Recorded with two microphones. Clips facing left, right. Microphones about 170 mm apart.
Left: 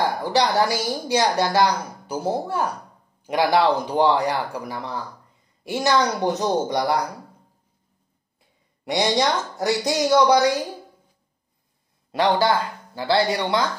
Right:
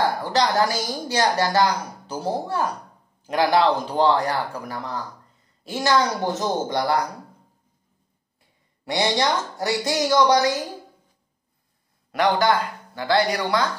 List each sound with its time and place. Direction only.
0.0 s a woman's voice: 15° left (ahead or behind)
8.9 s a woman's voice: 20° left (ahead or behind)
12.1 s a woman's voice: 30° left (ahead or behind)